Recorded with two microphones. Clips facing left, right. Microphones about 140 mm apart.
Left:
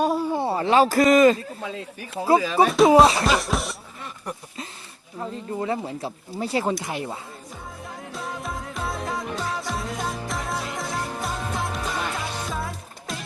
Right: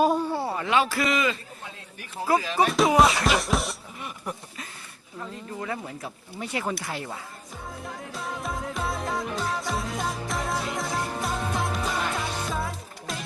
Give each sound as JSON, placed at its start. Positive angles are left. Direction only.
{"t": 0.0, "sound": "a sound", "side_deg": 0}
{"t": 0.3, "sound": "speech", "side_deg": 25}
{"t": 2.2, "sound": "speech", "side_deg": 25}
{"t": 2.6, "sound": "music", "side_deg": 0}
{"t": 2.9, "sound": "speech", "side_deg": 30}
{"t": 3.2, "sound": "music", "side_deg": 0}
{"t": 5.2, "sound": "speech", "side_deg": 30}
{"t": 6.8, "sound": "speech", "side_deg": 20}
{"t": 8.1, "sound": "music", "side_deg": 0}